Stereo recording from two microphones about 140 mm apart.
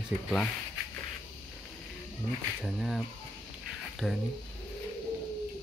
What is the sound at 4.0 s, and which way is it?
Speech, centre (ahead or behind).